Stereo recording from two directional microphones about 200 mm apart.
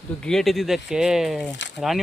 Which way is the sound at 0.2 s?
5° left (ahead or behind).